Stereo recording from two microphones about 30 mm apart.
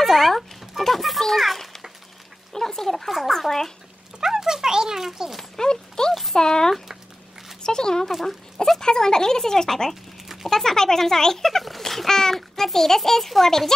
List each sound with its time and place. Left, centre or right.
0.0 s a sound: centre
0.3 s a sound: centre
1.3 s a child's voice: centre
2.5 s speech: centre
3.1 s a child's voice: centre
3.3 s a child's voice: centre
4.2 s speech: centre
5.6 s speech: left
10.2 s a sound: centre
10.5 s a child's voice: centre
11.8 s a sound: centre
12.1 s a child's voice: centre